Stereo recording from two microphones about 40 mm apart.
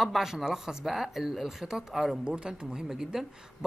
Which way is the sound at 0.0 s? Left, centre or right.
Centre.